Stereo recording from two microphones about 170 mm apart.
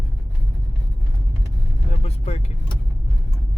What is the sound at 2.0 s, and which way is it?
Speech, 40° left (ahead or behind).